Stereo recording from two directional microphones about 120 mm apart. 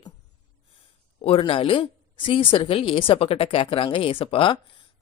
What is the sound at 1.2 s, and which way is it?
A woman's voice, 50° left (ahead or behind).